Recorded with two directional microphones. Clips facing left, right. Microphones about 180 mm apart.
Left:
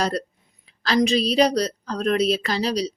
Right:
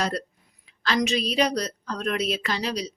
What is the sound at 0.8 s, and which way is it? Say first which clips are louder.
A woman's voice: left 5 dB; 35° left (ahead or behind).